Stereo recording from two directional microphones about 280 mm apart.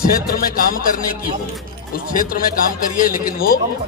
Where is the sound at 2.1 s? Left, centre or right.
Left.